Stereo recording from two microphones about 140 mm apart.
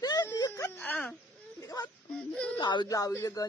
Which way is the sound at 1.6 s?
25° left (ahead or behind).